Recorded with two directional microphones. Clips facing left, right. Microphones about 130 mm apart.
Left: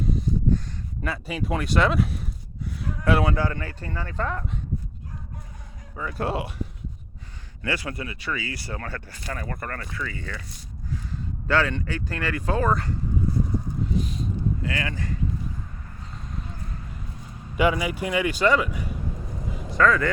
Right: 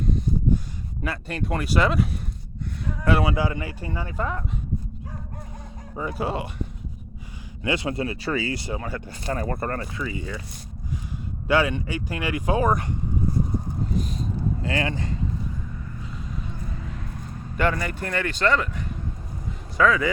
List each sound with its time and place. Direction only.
0.0 s a sound: 5° left (ahead or behind)
1.0 s speech: centre (ahead or behind)
2.8 s a sound: centre (ahead or behind)
3.3 s speech: 10° right (ahead or behind)
6.1 s speech: centre (ahead or behind)
7.6 s speech: 20° right (ahead or behind)
9.2 s speech: 30° right (ahead or behind); by 10.4 s 15° right (ahead or behind)
11.4 s speech: 15° right (ahead or behind)
13.9 s vehicle: 40° right (ahead or behind); by 15.2 s 25° right (ahead or behind)
17.6 s speech: 10° left (ahead or behind)
19.7 s speech: 5° right (ahead or behind)